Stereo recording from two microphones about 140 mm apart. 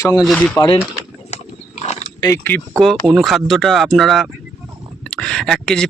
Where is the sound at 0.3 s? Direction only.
10° left (ahead or behind).